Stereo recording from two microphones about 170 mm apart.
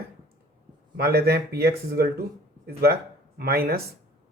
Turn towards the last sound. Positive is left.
turn(degrees=-65)  # may be behind; listen again after turning